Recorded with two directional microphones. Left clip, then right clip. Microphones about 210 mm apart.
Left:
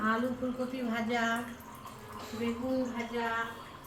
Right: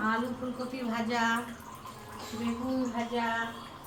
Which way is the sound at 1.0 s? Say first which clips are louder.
Right 2 dB; 15° right (ahead or behind).